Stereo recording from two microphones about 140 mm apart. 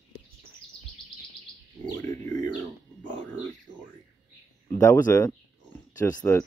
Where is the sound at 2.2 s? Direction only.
15° left (ahead or behind).